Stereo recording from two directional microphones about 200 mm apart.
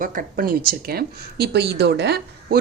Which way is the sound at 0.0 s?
45° right (ahead or behind).